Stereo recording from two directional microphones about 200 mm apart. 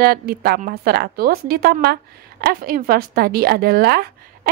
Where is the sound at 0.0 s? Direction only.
50° right (ahead or behind).